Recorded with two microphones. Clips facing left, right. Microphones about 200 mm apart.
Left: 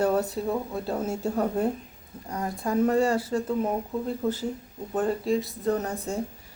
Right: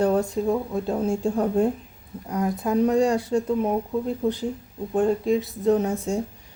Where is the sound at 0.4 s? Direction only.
Centre (ahead or behind).